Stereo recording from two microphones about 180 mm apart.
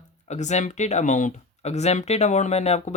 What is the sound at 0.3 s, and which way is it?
Speech, 40° left (ahead or behind).